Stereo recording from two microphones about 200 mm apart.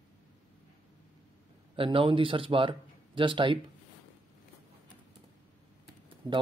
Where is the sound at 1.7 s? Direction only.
25° right (ahead or behind).